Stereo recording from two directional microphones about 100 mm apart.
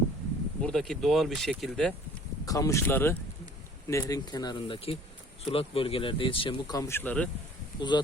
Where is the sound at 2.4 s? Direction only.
35° left (ahead or behind).